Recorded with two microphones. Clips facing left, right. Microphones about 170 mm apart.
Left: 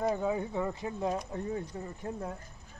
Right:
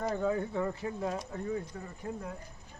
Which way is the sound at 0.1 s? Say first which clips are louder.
Even; 15° left (ahead or behind).